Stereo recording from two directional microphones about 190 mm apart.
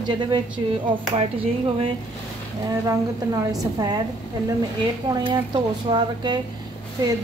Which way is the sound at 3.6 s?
20° right (ahead or behind).